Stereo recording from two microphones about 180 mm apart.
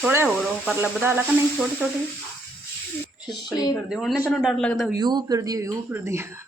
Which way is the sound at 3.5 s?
20° left (ahead or behind).